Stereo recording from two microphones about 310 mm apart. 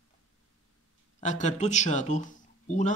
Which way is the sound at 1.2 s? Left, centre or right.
Left.